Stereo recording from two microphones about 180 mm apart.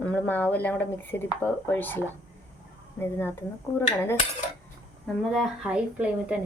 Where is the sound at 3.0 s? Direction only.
10° left (ahead or behind).